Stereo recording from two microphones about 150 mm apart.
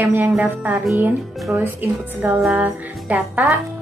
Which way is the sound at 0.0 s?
10° right (ahead or behind).